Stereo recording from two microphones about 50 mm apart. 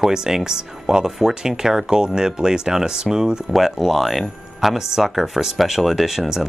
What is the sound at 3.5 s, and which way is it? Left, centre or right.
Speech, centre.